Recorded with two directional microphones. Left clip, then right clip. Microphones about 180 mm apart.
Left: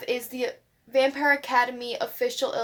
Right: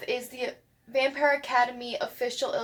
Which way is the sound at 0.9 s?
55° left (ahead or behind).